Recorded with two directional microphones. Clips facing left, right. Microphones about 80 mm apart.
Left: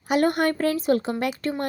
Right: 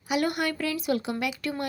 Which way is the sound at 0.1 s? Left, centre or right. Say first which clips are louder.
Left 6 dB; left.